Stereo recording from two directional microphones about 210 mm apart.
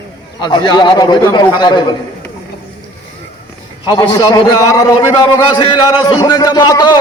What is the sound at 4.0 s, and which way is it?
A man's voice, 20° left (ahead or behind).